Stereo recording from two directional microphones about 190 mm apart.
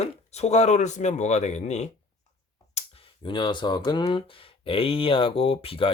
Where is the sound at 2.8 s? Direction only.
35° left (ahead or behind).